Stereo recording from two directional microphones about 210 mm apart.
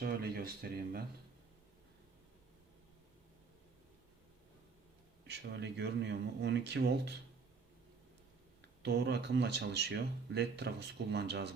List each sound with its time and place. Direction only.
0.0 s speech: 45° right (ahead or behind)
5.3 s speech: 55° right (ahead or behind)
8.8 s speech: 55° right (ahead or behind)